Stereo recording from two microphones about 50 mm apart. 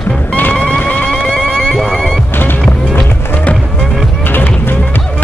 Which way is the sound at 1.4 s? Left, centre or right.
Centre.